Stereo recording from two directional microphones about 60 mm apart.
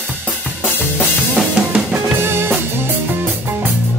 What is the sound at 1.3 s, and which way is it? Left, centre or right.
Drum kit, centre.